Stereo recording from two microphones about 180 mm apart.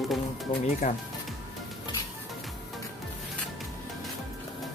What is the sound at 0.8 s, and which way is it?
Speech, 50° left (ahead or behind).